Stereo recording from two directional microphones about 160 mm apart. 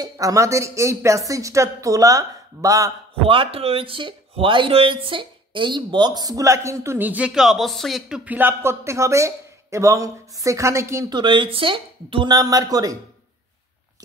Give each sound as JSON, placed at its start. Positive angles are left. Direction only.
{"t": 0.0, "sound": "speech", "side_deg": -20}
{"t": 3.3, "sound": "speech", "side_deg": -35}
{"t": 11.1, "sound": "speech", "side_deg": -30}